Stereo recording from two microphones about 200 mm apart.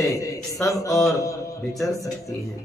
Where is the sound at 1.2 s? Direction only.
15° left (ahead or behind).